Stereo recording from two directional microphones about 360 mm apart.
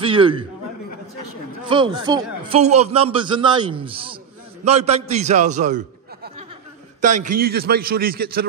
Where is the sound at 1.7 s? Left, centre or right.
Centre.